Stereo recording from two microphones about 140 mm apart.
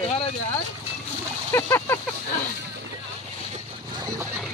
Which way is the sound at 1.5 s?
20° left (ahead or behind).